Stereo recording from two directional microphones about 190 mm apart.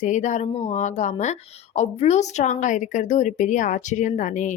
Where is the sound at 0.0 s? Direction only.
40° left (ahead or behind).